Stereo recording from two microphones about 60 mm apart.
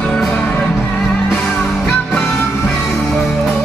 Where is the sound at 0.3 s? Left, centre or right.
Centre.